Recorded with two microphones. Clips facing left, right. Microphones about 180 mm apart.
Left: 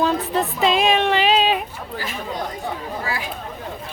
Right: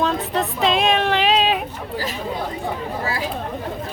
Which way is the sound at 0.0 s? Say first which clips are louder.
Left 1 dB; centre (ahead or behind).